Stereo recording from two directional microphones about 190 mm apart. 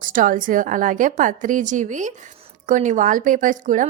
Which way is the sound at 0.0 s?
45° right (ahead or behind).